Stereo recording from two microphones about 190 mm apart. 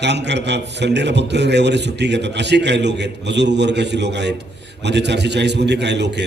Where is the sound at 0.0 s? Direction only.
65° right (ahead or behind).